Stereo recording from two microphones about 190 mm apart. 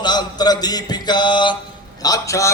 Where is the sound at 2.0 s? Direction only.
20° left (ahead or behind).